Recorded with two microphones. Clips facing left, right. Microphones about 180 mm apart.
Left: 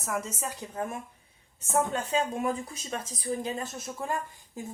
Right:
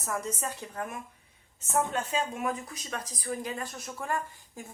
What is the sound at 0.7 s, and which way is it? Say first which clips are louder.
Speech: left 6 dB; 25° left (ahead or behind).